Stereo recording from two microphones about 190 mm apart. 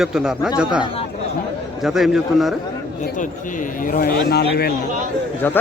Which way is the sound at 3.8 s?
50° left (ahead or behind).